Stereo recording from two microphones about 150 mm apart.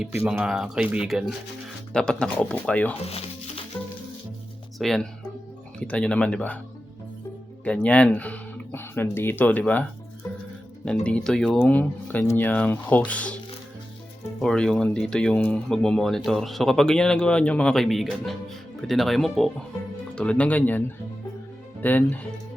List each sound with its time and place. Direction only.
0.3 s speech: 5° right (ahead or behind); by 3.0 s 10° left (ahead or behind)
3.1 s music: 40° left (ahead or behind)
4.8 s speech: centre (ahead or behind)
7.6 s speech: 5° left (ahead or behind)
11.0 s speech: 5° left (ahead or behind)
14.4 s speech: 5° left (ahead or behind)